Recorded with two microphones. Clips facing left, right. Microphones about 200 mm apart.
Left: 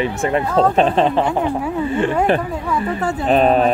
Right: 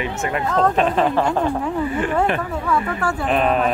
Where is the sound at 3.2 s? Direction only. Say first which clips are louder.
Left 5 dB; 35° left (ahead or behind).